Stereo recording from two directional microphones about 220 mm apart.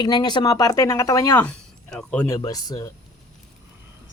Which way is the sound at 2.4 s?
15° left (ahead or behind).